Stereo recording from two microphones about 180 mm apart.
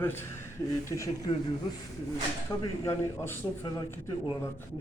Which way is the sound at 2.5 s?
15° left (ahead or behind).